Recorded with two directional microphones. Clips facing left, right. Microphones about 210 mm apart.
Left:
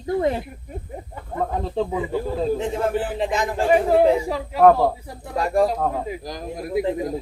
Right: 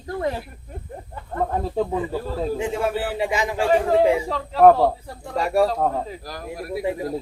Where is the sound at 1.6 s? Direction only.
5° right (ahead or behind).